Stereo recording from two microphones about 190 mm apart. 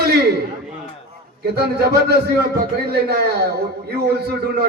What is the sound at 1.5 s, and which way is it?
A man's voice, 55° right (ahead or behind).